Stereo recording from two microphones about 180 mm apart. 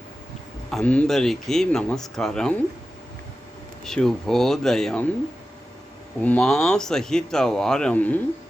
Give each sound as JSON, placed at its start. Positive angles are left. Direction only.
{"t": 0.7, "sound": "speech", "side_deg": 5}
{"t": 3.8, "sound": "speech", "side_deg": 5}
{"t": 6.2, "sound": "speech", "side_deg": 5}